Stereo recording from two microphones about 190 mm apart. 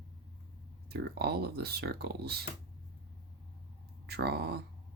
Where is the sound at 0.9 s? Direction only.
55° right (ahead or behind).